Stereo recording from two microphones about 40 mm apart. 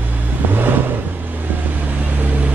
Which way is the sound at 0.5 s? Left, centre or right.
Right.